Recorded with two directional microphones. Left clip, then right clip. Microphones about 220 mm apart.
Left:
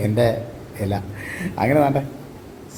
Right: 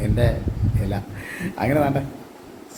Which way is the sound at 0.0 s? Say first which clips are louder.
Left 5 dB; 15° left (ahead or behind).